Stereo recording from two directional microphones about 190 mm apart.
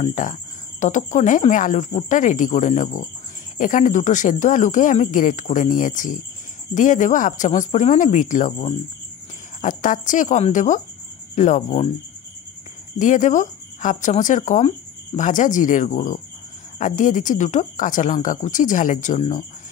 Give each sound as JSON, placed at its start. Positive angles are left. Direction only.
{"t": 0.0, "sound": "speech", "side_deg": 40}
{"t": 13.0, "sound": "speech", "side_deg": 40}